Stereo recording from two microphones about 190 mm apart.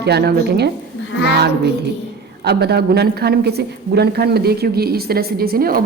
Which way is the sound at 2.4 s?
60° right (ahead or behind).